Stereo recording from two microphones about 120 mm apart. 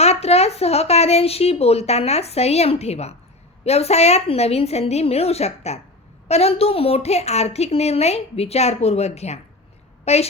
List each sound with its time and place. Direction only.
0.0 s a woman's voice: 60° left (ahead or behind)